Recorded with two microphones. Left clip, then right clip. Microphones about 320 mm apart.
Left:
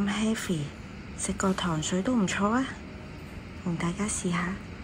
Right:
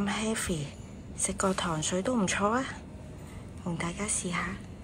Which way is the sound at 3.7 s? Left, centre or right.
Centre.